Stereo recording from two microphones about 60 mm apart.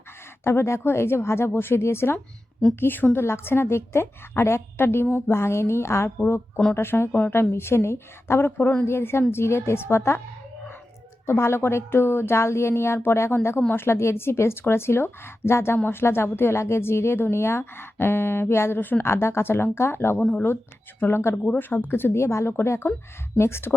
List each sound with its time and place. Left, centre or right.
0.4 s speech: left
2.8 s speech: left
11.3 s speech: left
19.0 s speech: left
21.3 s speech: left
21.6 s speech: left